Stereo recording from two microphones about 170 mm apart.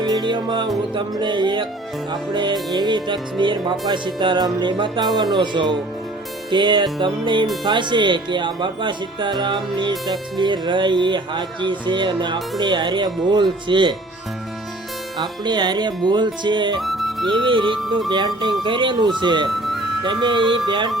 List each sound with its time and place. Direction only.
0.0 s music: 25° right (ahead or behind)
0.9 s speech: 25° right (ahead or behind)
15.2 s speech: 25° right (ahead or behind)
16.8 s music: centre (ahead or behind)
17.2 s speech: 30° right (ahead or behind)
19.5 s music: centre (ahead or behind)
20.0 s speech: 25° right (ahead or behind)